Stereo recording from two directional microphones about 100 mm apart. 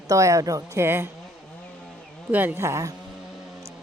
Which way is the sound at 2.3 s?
15° right (ahead or behind).